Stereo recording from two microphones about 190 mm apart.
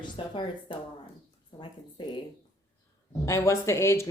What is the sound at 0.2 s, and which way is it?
Speech, 25° left (ahead or behind).